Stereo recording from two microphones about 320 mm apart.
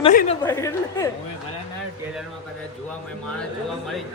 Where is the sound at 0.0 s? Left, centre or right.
Left.